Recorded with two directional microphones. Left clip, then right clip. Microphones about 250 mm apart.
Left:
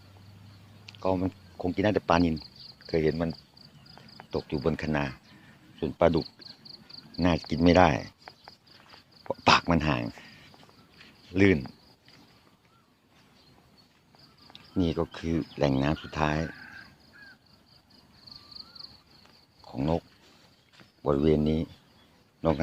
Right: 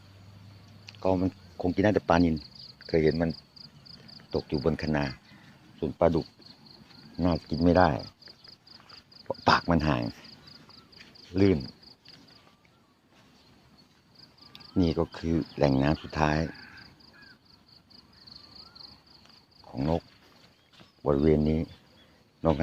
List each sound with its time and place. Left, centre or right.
0.9 s speech: centre
2.3 s cricket: left
2.8 s speech: centre
9.2 s cricket: centre
11.3 s speech: centre
14.5 s speech: centre
19.6 s speech: centre